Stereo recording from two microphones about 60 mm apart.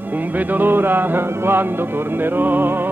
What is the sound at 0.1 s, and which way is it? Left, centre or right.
Music, right.